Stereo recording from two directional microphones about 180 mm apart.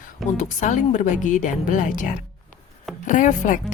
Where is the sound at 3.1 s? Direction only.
45° left (ahead or behind).